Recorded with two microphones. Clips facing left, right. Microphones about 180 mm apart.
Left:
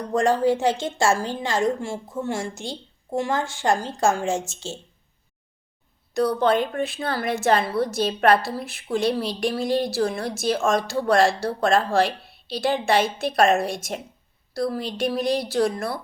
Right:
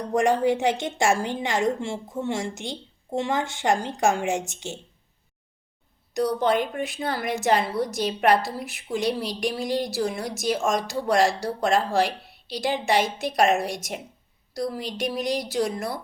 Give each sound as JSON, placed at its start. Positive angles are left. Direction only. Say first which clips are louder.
{"t": 0.1, "sound": "a woman's voice", "louder": "left 1 dB", "side_deg": -20}
{"t": 6.1, "sound": "a woman's voice", "louder": "left 2 dB", "side_deg": -15}